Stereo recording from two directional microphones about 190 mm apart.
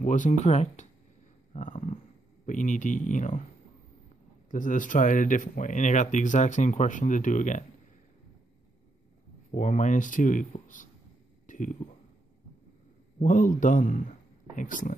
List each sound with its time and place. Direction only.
0.0 s speech: 40° left (ahead or behind)
1.5 s a sound: 45° left (ahead or behind)
2.4 s speech: 40° left (ahead or behind)
4.5 s speech: 45° left (ahead or behind)
9.5 s speech: 40° left (ahead or behind)
11.4 s a sound: 45° left (ahead or behind)
13.2 s speech: 45° left (ahead or behind)